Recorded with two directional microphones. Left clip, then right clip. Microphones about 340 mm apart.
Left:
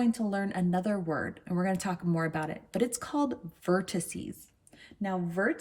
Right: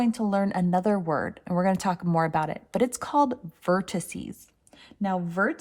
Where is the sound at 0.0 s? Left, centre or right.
Centre.